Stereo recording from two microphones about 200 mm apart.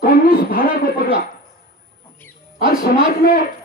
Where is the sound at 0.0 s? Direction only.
45° left (ahead or behind).